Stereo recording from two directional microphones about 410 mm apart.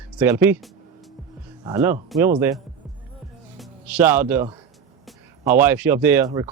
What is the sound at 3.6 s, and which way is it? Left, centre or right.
Speech, centre.